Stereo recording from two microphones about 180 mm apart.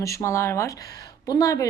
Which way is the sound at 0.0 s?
15° left (ahead or behind).